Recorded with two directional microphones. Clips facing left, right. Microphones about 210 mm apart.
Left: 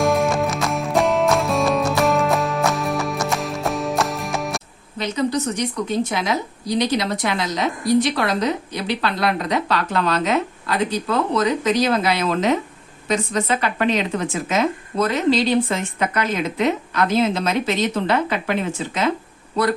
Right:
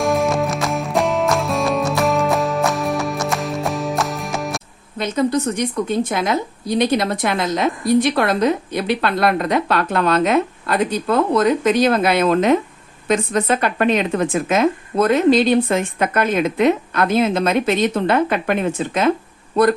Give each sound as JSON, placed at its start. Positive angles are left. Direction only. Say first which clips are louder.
{"t": 0.0, "sound": "music", "louder": "right 1 dB", "side_deg": 0}
{"t": 4.9, "sound": "a woman's voice", "louder": "right 3 dB", "side_deg": -50}